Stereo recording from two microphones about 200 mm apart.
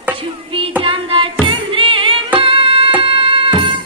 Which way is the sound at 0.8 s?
25° right (ahead or behind).